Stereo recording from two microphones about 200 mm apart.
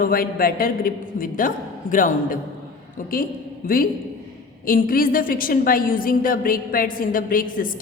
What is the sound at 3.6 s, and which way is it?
A woman's voice, 45° left (ahead or behind).